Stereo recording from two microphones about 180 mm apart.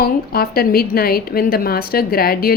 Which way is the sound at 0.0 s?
55° left (ahead or behind).